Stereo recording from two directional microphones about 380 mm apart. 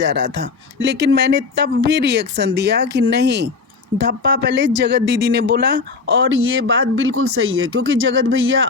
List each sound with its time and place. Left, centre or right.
0.0 s speech: right